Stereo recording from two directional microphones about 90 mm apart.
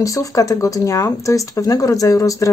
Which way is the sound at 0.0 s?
40° left (ahead or behind).